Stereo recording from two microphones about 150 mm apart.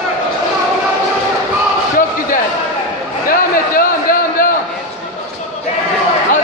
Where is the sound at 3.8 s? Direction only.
75° left (ahead or behind).